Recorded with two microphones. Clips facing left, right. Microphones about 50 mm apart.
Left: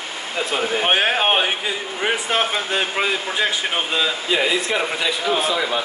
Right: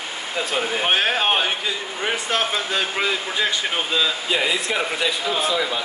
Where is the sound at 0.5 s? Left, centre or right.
Centre.